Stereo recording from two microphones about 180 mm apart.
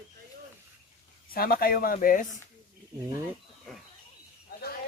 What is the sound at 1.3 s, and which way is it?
Speech, 55° left (ahead or behind).